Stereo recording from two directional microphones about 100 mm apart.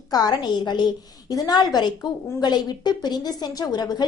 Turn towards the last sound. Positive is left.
turn(degrees=45)  # may be behind; listen again after turning